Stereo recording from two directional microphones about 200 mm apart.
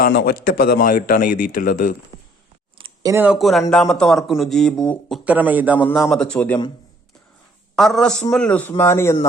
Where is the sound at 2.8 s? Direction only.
25° right (ahead or behind).